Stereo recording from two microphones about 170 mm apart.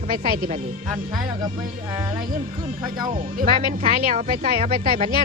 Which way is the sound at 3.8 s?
55° right (ahead or behind).